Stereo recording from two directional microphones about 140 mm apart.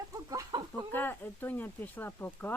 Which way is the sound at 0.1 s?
25° right (ahead or behind).